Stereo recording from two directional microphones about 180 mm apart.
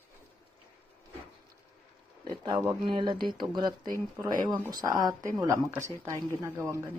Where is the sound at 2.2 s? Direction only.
25° right (ahead or behind).